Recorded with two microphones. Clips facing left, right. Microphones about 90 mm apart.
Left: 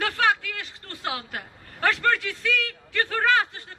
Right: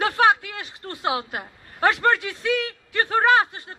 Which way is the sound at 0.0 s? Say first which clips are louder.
Right 5 dB; 25° right (ahead or behind).